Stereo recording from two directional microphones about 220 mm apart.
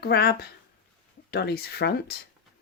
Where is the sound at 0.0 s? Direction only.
45° left (ahead or behind).